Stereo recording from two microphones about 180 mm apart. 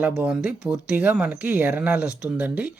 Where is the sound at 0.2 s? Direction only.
5° right (ahead or behind).